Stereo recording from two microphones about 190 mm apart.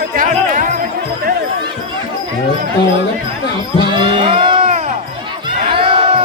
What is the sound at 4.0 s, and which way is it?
Music, 25° right (ahead or behind).